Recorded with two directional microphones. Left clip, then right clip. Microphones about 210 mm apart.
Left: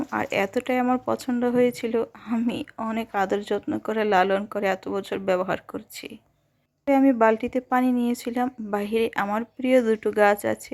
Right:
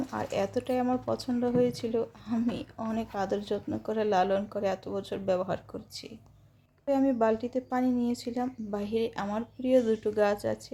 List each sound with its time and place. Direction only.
0.1 s speech: 30° left (ahead or behind)